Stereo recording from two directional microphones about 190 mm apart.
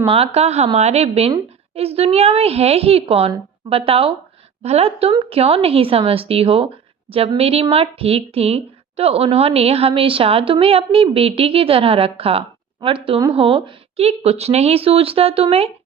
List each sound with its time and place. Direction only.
0.1 s speech: 30° right (ahead or behind)